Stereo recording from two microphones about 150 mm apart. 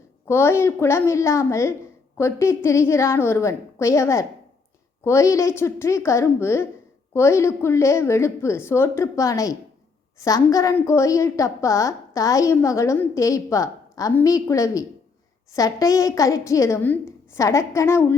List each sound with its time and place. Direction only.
0.3 s a woman's voice: 15° left (ahead or behind)